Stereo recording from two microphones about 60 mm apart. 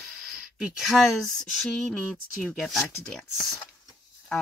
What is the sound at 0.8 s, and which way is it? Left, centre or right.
Speech, centre.